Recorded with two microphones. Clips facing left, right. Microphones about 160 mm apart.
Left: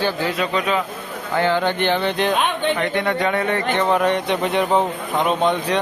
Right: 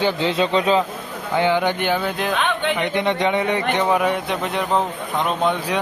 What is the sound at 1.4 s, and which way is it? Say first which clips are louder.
Speech: even; 15° right (ahead or behind).